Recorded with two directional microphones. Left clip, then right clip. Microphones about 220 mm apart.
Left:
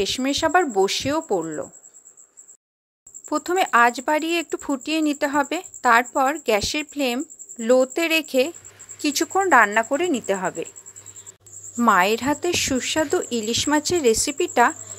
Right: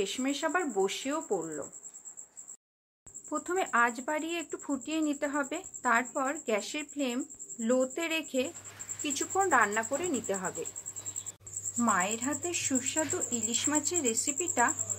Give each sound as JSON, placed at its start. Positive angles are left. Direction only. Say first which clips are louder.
{"t": 0.0, "sound": "speech", "louder": "left 10 dB", "side_deg": 40}
{"t": 3.3, "sound": "speech", "louder": "left 11 dB", "side_deg": 40}
{"t": 11.8, "sound": "speech", "louder": "left 12 dB", "side_deg": 45}